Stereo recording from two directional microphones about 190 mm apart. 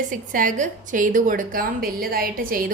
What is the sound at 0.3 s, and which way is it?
A woman's voice, 45° right (ahead or behind).